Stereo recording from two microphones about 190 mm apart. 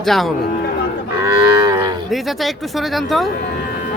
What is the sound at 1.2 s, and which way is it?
Livestock, 20° right (ahead or behind).